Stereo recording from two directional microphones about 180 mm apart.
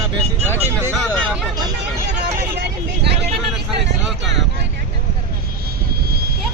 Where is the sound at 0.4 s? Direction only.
15° left (ahead or behind).